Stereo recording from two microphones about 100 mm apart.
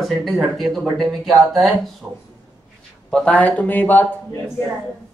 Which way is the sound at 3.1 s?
10° left (ahead or behind).